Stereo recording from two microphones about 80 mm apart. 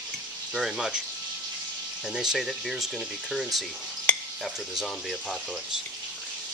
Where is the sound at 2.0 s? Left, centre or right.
Centre.